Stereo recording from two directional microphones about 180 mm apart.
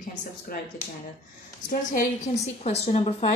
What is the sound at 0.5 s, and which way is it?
Speech, 55° left (ahead or behind).